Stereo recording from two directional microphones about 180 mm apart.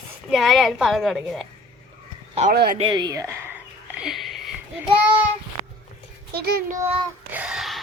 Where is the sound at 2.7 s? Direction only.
25° right (ahead or behind).